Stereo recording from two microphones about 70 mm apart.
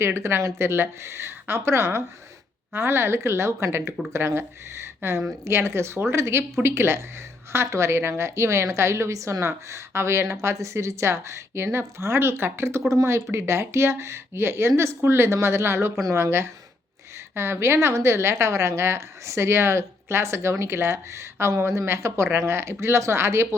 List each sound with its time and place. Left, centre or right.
0.0 s a woman's voice: right